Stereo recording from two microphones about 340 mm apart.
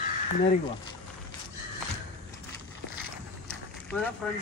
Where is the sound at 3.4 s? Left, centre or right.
Centre.